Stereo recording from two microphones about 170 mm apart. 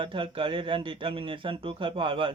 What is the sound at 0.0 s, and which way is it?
Speech, 30° right (ahead or behind).